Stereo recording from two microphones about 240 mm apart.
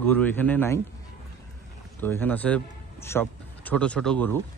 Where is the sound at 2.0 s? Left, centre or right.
Centre.